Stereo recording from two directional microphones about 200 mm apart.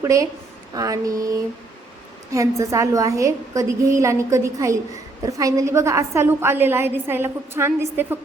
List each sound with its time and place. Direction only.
0.0 s a woman's voice: 15° right (ahead or behind)